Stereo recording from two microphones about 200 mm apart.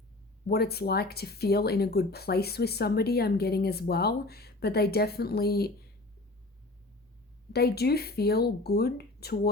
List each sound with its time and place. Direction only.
0.4 s speech: 50° left (ahead or behind)
7.5 s speech: 50° left (ahead or behind)